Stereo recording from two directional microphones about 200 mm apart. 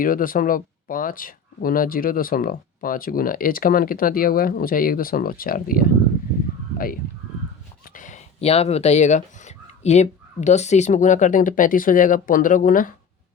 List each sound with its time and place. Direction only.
0.0 s speech: 45° left (ahead or behind)